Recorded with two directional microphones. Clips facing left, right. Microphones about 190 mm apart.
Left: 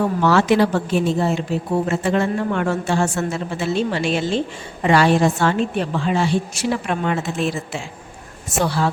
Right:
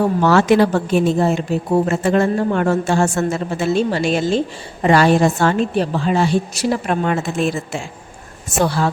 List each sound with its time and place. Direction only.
0.2 s speech: 45° right (ahead or behind)